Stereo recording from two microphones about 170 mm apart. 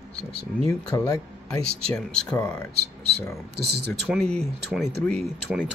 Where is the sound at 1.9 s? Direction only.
10° left (ahead or behind).